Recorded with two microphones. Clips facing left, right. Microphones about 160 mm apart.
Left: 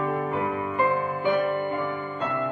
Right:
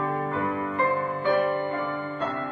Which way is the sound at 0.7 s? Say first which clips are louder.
Left 2 dB; 20° left (ahead or behind).